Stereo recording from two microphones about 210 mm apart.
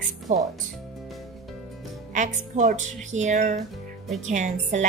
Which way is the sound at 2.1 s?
35° right (ahead or behind).